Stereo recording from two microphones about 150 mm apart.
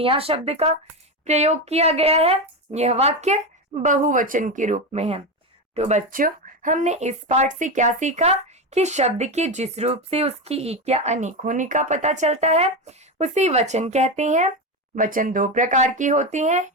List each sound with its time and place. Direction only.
0.0 s speech: 40° right (ahead or behind)
14.9 s speech: 65° right (ahead or behind)